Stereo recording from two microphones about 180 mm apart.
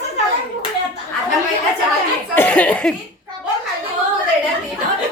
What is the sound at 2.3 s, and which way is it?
Speech, 10° left (ahead or behind).